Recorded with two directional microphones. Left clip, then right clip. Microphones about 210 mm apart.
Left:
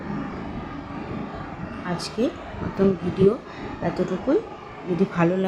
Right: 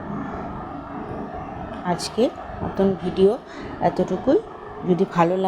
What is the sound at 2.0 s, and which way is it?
Speech, 15° right (ahead or behind).